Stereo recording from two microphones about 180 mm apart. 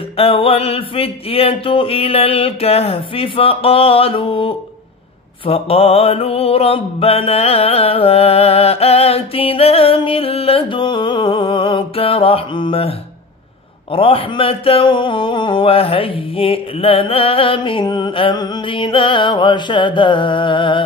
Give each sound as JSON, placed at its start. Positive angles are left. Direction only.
{"t": 0.2, "sound": "mantra", "side_deg": 30}
{"t": 13.9, "sound": "speech", "side_deg": 30}